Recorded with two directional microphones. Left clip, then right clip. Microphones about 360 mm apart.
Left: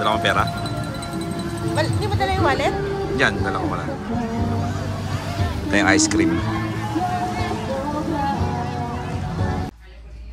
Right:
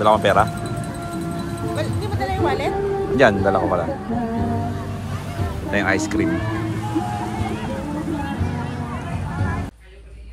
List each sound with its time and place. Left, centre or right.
0.0 s speech: centre
1.8 s music: left
3.2 s speech: centre
5.7 s speech: centre